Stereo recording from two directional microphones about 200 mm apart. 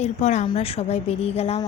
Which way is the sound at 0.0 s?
35° left (ahead or behind).